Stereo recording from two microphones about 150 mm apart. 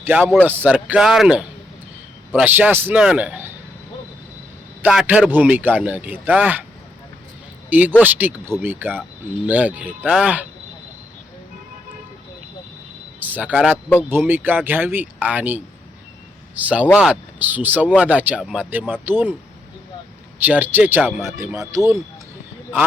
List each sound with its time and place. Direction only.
0.0 s speech: 10° right (ahead or behind)
4.8 s speech: 5° right (ahead or behind)
7.7 s speech: 10° right (ahead or behind)
13.1 s speech: 10° right (ahead or behind)
20.4 s speech: 10° right (ahead or behind)